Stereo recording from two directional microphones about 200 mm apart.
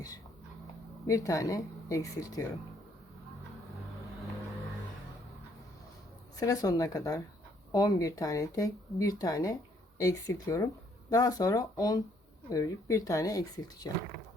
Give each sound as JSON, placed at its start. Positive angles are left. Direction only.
{"t": 1.0, "sound": "speech", "side_deg": 15}
{"t": 6.4, "sound": "speech", "side_deg": 15}